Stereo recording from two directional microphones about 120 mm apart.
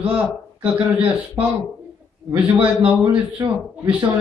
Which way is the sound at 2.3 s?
10° right (ahead or behind).